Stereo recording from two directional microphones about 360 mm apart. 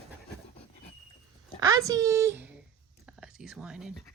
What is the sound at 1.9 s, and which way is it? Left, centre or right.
Speech, centre.